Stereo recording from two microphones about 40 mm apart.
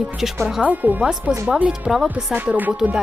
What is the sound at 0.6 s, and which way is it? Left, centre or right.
Music, right.